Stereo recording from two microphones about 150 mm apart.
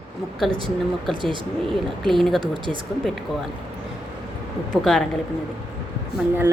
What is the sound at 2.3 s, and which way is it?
Speech, 35° right (ahead or behind).